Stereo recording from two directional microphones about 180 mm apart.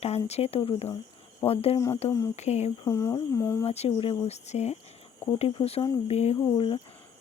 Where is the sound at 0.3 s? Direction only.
35° left (ahead or behind).